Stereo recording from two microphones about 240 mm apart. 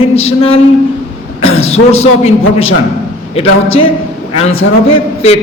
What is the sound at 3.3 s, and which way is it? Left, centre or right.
A man's voice, left.